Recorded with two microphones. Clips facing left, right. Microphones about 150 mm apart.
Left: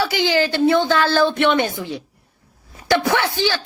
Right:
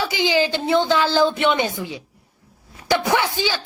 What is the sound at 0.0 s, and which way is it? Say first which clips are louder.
Speech: left 1 dB; 20° right (ahead or behind).